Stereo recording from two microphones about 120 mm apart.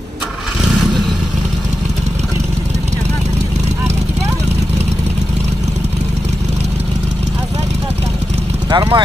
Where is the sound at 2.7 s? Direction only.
70° right (ahead or behind).